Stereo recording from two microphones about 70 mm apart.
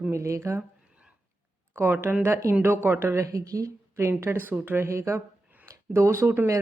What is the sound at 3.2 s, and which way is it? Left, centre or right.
Speech, right.